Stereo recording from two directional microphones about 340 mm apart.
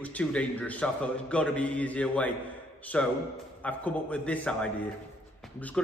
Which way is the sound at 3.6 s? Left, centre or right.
Centre.